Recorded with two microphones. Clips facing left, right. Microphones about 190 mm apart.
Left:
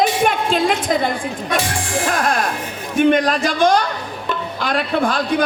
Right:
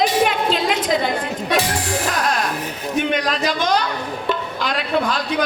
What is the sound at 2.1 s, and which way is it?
Music, 50° left (ahead or behind).